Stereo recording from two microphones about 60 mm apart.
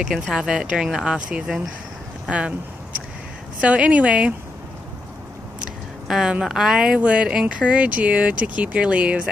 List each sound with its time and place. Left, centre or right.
0.0 s speech: centre
2.2 s speech: centre
3.6 s speech: right
6.0 s a woman's voice: centre
7.0 s speech: right